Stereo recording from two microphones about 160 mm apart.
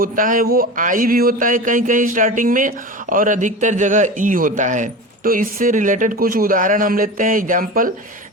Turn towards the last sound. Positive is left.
turn(degrees=-60)  # may be behind; listen again after turning